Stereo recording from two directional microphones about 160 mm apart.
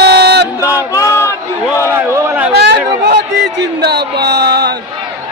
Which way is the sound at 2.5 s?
90° right.